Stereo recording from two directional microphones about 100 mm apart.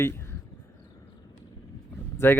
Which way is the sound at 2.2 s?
20° left (ahead or behind).